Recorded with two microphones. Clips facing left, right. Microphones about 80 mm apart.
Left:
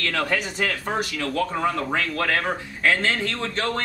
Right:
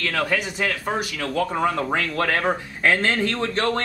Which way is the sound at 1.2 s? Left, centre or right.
Centre.